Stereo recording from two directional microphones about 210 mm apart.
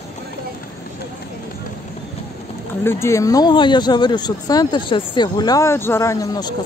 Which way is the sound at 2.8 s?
15° left (ahead or behind).